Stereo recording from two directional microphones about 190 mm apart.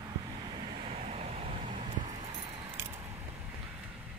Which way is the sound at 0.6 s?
35° right (ahead or behind).